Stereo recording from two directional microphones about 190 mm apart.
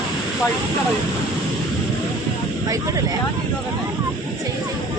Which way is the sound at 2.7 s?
15° right (ahead or behind).